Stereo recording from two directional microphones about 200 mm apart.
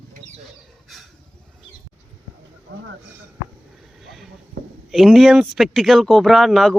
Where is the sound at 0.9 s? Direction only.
Centre (ahead or behind).